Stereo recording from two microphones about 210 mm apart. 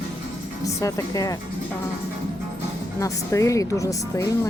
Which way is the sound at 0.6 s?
15° left (ahead or behind).